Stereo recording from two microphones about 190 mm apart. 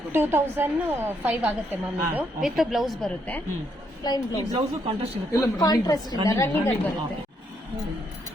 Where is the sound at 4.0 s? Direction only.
20° left (ahead or behind).